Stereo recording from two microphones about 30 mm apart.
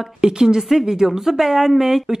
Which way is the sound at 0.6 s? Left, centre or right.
Centre.